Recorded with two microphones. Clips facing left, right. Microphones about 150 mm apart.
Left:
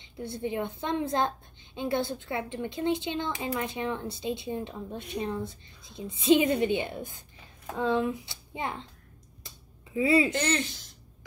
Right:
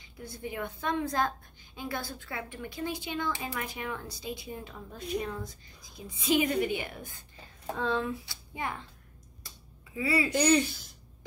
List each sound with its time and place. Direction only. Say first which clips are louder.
0.0 s speech: left 7 dB; 25° left (ahead or behind)
9.9 s speech: left 6 dB; 20° left (ahead or behind)
10.3 s speech: right 4 dB; centre (ahead or behind)